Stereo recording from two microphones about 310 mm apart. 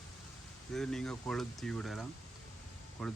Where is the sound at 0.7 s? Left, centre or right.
Centre.